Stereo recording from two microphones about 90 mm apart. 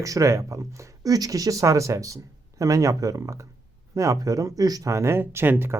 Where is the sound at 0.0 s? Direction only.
40° right (ahead or behind).